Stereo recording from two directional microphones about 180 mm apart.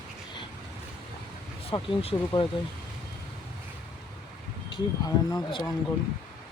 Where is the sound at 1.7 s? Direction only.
35° left (ahead or behind).